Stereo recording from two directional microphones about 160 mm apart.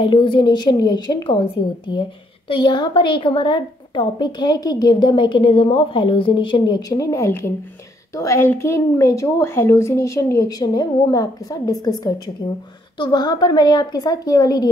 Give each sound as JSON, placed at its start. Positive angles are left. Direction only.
{"t": 0.0, "sound": "a woman's voice", "side_deg": 30}